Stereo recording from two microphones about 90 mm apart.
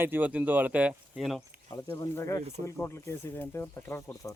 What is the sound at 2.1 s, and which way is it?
Speech, 35° left (ahead or behind).